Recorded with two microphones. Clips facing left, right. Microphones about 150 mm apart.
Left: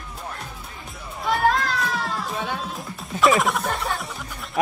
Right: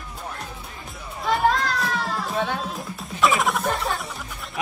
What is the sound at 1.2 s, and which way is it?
Children playing, centre (ahead or behind).